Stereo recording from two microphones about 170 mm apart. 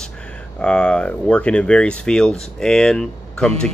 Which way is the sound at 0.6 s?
5° left (ahead or behind).